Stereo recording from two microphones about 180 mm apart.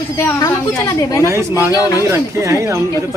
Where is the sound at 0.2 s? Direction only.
15° left (ahead or behind).